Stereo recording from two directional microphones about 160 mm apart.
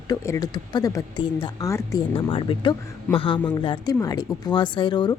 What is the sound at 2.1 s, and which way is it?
A woman's voice, 35° left (ahead or behind).